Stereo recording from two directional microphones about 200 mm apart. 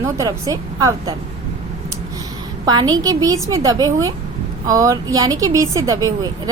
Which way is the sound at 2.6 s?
20° right (ahead or behind).